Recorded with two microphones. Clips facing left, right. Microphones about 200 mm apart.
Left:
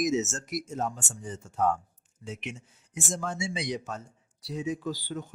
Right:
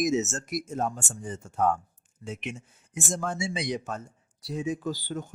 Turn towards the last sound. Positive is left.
turn(degrees=-45)  # may be behind; listen again after turning